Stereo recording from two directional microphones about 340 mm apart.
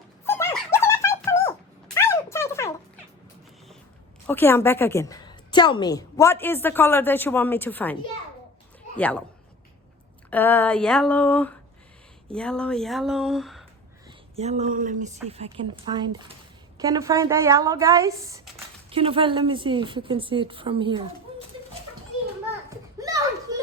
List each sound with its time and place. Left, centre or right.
0.3 s dog: centre
2.0 s a sound: centre
4.3 s a woman's voice: centre
9.0 s speech: centre
10.2 s speech: centre
14.3 s a woman's voice: centre
18.9 s a woman's voice: centre
22.7 s a sound: centre